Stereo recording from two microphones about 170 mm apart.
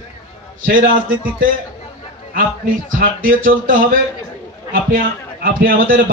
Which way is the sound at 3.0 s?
55° right (ahead or behind).